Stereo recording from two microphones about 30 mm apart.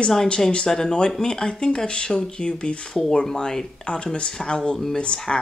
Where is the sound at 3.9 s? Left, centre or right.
Left.